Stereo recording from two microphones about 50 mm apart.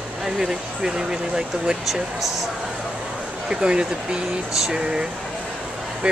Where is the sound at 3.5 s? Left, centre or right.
Centre.